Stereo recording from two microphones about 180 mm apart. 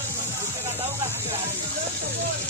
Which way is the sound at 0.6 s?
15° right (ahead or behind).